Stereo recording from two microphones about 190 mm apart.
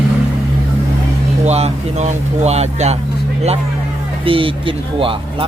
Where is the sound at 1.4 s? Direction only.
35° right (ahead or behind).